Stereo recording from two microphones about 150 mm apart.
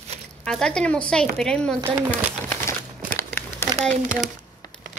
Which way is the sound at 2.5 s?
15° left (ahead or behind).